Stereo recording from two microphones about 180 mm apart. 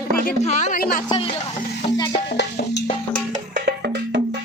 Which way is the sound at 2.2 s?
70° left (ahead or behind).